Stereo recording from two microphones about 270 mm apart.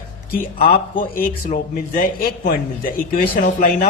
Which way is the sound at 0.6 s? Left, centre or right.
Left.